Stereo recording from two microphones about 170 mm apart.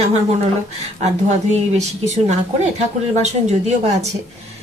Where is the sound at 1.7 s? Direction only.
45° right (ahead or behind).